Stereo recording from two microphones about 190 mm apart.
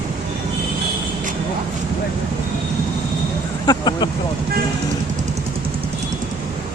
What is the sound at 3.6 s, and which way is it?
Speech, 20° left (ahead or behind).